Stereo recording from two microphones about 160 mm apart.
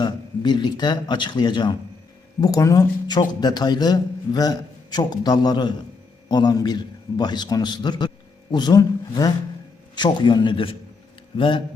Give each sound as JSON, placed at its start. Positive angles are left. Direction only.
{"t": 0.0, "sound": "a man's voice", "side_deg": 30}